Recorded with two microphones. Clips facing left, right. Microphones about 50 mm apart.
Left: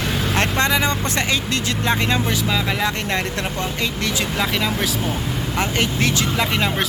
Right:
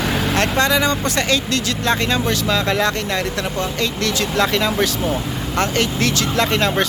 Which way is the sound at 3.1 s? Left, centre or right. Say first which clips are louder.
Right 1 dB; left.